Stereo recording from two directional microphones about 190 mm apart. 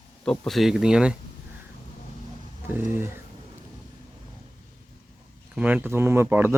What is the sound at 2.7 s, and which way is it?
Speech, 10° right (ahead or behind).